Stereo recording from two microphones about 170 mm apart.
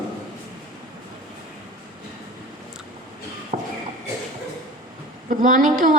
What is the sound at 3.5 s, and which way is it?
Shuffle, 45° right (ahead or behind).